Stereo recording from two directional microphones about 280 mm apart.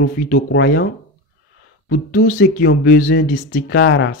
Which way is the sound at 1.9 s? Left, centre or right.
Left.